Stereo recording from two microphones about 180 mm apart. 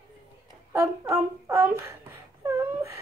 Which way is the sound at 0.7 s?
15° right (ahead or behind).